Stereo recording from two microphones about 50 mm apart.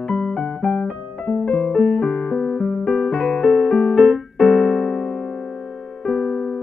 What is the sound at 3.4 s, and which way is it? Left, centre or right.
Keyboard, centre.